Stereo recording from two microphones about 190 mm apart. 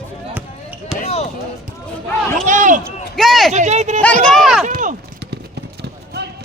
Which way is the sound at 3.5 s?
35° right (ahead or behind).